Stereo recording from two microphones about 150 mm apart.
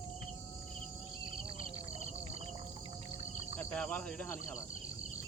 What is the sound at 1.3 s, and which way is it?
Cricket, 40° right (ahead or behind).